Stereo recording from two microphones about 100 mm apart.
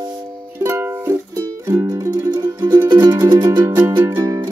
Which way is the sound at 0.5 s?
25° right (ahead or behind).